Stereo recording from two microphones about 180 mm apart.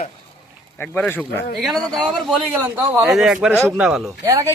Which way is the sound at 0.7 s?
10° left (ahead or behind).